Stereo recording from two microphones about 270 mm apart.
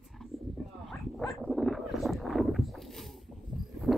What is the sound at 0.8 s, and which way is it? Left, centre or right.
Dog, centre.